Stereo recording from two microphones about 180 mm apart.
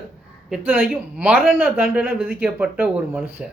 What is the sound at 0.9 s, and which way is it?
Speech, 10° right (ahead or behind).